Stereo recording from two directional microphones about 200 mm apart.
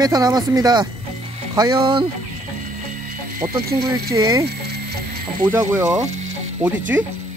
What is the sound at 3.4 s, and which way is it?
Speech, 25° right (ahead or behind).